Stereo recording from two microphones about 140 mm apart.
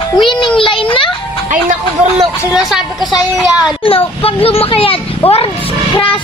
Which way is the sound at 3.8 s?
40° left (ahead or behind).